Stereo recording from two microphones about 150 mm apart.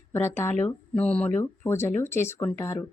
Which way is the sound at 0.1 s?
15° left (ahead or behind).